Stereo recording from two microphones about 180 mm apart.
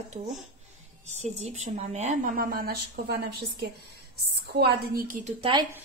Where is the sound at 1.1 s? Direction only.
40° right (ahead or behind); by 3.1 s 55° right (ahead or behind).